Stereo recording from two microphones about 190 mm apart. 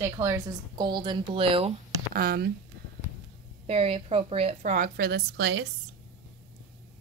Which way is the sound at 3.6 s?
30° right (ahead or behind).